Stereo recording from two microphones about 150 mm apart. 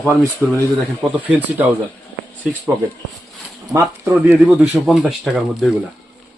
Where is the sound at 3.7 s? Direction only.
20° right (ahead or behind).